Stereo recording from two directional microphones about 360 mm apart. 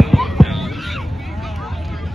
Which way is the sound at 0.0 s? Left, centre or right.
Centre.